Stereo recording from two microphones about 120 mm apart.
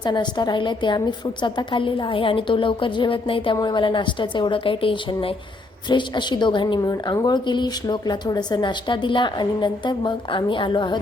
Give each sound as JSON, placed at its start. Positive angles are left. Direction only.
{"t": 0.0, "sound": "a woman's voice", "side_deg": 40}